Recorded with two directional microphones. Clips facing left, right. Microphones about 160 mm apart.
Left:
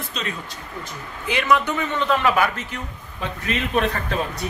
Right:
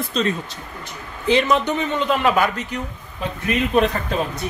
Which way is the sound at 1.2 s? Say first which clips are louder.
Right 3 dB; 25° right (ahead or behind).